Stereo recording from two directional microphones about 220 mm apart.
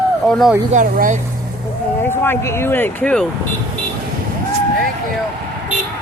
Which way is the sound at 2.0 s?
10° left (ahead or behind).